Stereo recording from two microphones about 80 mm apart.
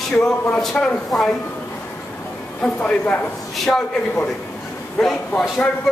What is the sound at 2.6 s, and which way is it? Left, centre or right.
A man's voice, centre.